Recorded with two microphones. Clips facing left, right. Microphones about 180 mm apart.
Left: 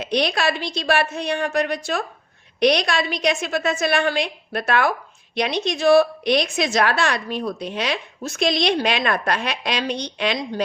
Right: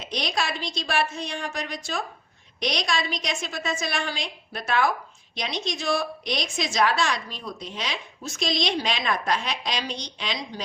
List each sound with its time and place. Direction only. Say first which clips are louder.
0.0 s a woman's voice: left 8 dB; 65° left (ahead or behind)